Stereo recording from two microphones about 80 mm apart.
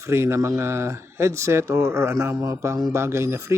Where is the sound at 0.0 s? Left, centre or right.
Right.